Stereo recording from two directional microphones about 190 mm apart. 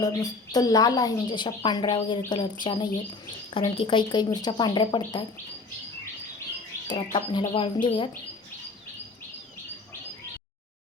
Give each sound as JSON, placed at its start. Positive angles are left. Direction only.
{"t": 0.0, "sound": "a woman's voice", "side_deg": 20}
{"t": 6.8, "sound": "a woman's voice", "side_deg": 25}